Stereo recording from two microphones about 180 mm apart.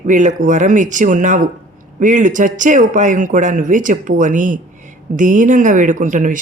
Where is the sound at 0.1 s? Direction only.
45° right (ahead or behind).